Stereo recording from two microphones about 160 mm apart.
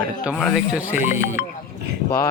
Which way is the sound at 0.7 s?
10° right (ahead or behind).